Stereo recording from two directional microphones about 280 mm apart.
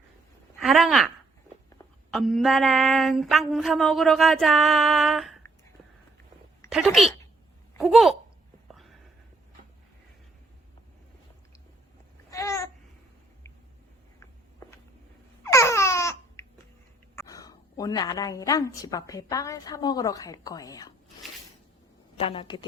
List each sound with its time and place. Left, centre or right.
0.6 s speech: centre
2.0 s a sound: centre
6.7 s speech: centre
7.8 s a sound: centre
12.3 s babbling: centre
14.2 s walk: centre
15.4 s a sound: centre
17.2 s a woman's voice: centre
22.2 s a woman's voice: centre